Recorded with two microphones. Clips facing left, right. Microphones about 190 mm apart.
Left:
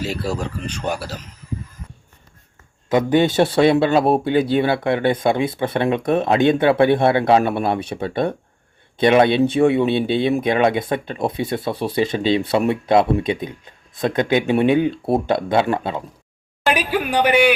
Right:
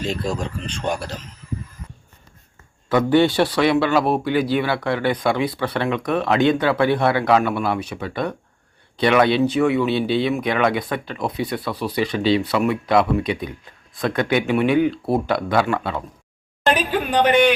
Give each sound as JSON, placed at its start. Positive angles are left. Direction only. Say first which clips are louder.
{"t": 0.0, "sound": "speech", "louder": "even", "side_deg": 5}
{"t": 2.9, "sound": "speech", "louder": "even", "side_deg": 20}
{"t": 16.6, "sound": "speech", "louder": "even", "side_deg": 10}